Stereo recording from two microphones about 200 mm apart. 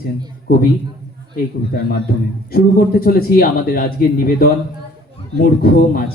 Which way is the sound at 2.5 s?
50° left (ahead or behind).